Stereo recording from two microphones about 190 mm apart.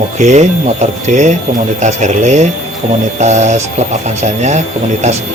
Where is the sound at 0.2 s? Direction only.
35° right (ahead or behind).